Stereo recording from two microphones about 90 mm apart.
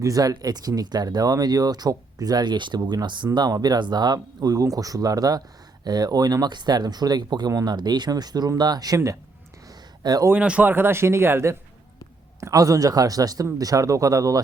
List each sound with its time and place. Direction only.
0.0 s speech: 40° right (ahead or behind)
10.0 s speech: 45° right (ahead or behind)
10.3 s speech: 15° right (ahead or behind)
12.4 s speech: 40° right (ahead or behind)